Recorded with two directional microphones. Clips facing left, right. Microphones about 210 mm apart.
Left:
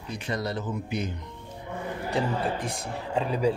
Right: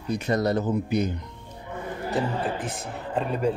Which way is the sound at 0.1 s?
45° right (ahead or behind).